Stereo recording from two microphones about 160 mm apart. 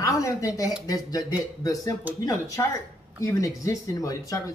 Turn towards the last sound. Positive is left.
turn(degrees=20)  # may be behind; listen again after turning